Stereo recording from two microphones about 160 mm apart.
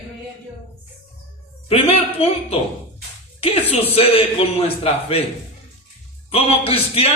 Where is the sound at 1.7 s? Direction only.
40° left (ahead or behind).